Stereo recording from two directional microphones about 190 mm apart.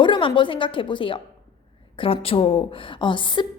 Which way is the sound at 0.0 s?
25° left (ahead or behind).